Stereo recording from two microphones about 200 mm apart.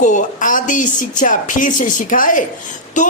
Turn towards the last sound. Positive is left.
turn(degrees=40)  # may be behind; listen again after turning